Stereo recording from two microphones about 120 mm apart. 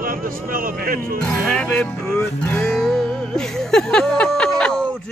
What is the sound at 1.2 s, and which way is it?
Music, 5° left (ahead or behind).